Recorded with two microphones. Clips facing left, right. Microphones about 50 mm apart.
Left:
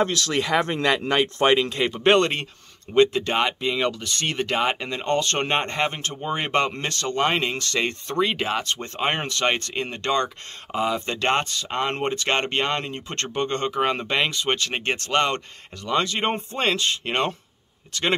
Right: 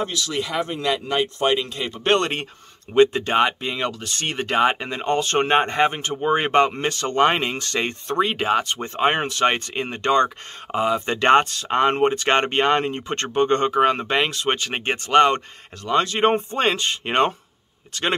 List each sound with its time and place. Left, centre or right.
0.0 s speech: left
3.0 s speech: centre
7.1 s speech: right
8.8 s speech: centre
9.5 s speech: right
11.1 s speech: right
11.9 s speech: centre
12.3 s speech: right
13.9 s speech: centre
15.9 s speech: centre
16.5 s speech: right